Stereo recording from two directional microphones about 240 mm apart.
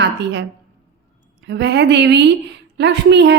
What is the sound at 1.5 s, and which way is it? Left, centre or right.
A woman's voice, right.